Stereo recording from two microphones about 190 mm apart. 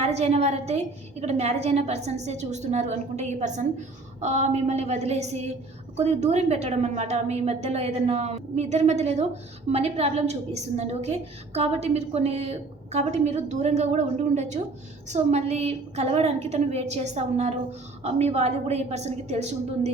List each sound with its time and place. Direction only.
0.0 s a woman's voice: 35° right (ahead or behind)